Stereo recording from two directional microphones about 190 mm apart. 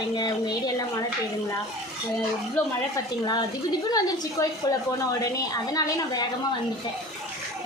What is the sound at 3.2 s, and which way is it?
A woman's voice, 20° left (ahead or behind).